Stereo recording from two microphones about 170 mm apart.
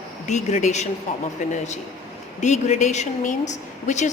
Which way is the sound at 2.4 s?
45° left (ahead or behind).